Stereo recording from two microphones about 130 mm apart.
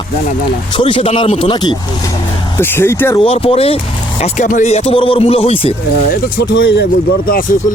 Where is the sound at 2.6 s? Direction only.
15° left (ahead or behind).